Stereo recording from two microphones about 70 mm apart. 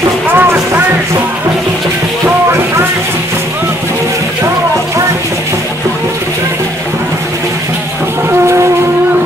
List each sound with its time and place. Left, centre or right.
0.3 s music: right